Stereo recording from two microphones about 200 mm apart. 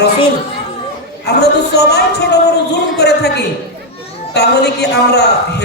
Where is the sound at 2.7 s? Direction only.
55° left (ahead or behind).